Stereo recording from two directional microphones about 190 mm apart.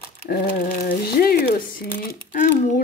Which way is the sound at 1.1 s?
55° left (ahead or behind).